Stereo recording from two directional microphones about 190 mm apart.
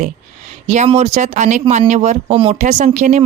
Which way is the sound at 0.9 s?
35° right (ahead or behind).